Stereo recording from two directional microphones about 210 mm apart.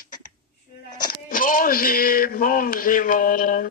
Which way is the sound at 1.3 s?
40° left (ahead or behind).